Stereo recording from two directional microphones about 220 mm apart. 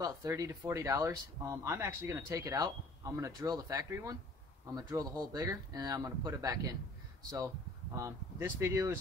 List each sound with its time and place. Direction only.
0.0 s speech: 15° right (ahead or behind)